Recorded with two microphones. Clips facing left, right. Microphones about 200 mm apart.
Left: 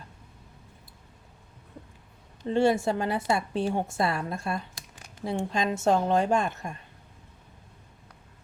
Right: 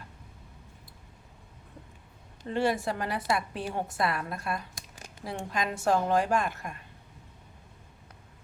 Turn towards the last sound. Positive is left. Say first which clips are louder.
# left 3 dB
turn(degrees=25)  # may be behind; listen again after turning